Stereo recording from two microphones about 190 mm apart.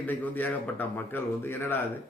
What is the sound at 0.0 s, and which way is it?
Speech, 10° left (ahead or behind).